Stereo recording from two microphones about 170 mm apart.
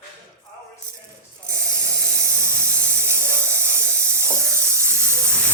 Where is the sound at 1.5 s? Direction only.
20° right (ahead or behind).